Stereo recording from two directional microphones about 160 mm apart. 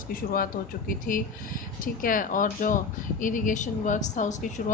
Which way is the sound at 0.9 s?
60° left (ahead or behind).